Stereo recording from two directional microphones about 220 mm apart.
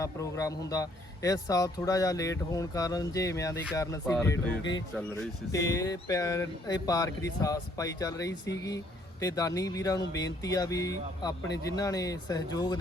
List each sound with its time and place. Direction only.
0.0 s a man's voice: 15° left (ahead or behind)
4.0 s a man's voice: 5° left (ahead or behind)